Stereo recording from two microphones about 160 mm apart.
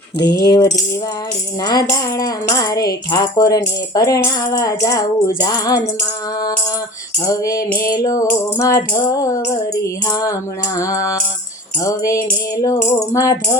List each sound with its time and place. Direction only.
0.2 s music: 90° left
1.6 s tambourine: 20° left (ahead or behind)
7.3 s tambourine: 20° left (ahead or behind)